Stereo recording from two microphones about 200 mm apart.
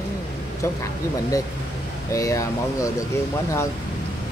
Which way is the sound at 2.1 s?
15° left (ahead or behind).